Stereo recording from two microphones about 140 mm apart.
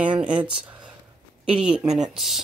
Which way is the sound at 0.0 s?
10° right (ahead or behind).